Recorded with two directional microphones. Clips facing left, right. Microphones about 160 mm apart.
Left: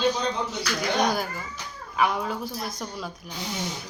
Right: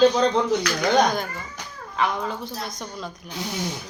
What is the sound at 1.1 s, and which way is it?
Speech, 5° left (ahead or behind).